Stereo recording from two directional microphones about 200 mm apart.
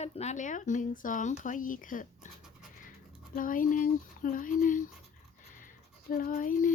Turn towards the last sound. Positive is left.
turn(degrees=40)  # may be behind; listen again after turning